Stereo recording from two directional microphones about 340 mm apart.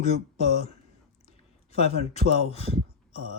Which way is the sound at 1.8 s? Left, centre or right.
Centre.